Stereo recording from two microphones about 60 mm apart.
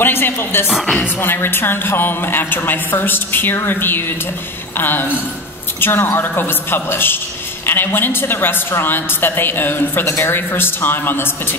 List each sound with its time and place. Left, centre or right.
0.0 s a woman's voice: left
0.7 s speech: centre
1.2 s a woman's voice: left